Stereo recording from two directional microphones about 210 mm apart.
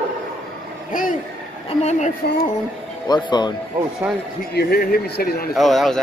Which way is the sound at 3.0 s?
20° left (ahead or behind).